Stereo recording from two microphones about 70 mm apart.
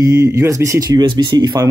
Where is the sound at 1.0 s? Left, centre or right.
Right.